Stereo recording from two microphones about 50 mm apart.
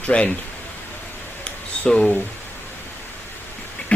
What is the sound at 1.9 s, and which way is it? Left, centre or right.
Speech, centre.